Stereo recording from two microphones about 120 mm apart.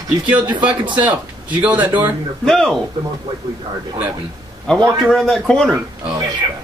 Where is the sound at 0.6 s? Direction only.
10° right (ahead or behind).